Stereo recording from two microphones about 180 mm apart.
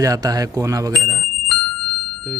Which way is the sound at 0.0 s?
20° right (ahead or behind).